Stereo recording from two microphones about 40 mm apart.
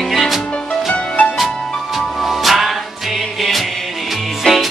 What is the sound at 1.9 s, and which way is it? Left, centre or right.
Music, centre.